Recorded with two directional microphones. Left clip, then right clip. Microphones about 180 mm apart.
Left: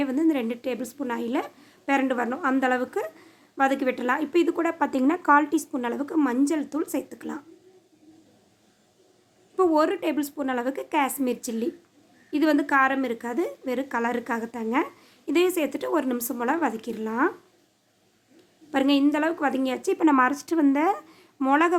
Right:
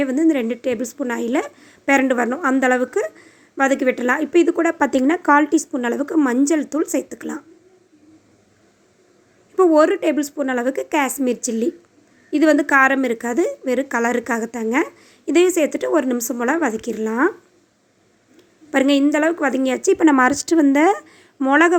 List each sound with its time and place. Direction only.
0.0 s a woman's voice: 20° right (ahead or behind)
9.6 s a woman's voice: 20° right (ahead or behind)
18.7 s a woman's voice: 20° right (ahead or behind)